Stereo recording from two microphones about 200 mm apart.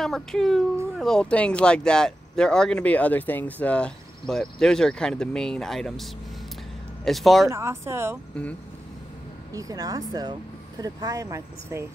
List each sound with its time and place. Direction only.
0.0 s speech: centre (ahead or behind)
7.1 s speech: centre (ahead or behind)
7.4 s speech: 15° right (ahead or behind)
9.5 s speech: 15° right (ahead or behind)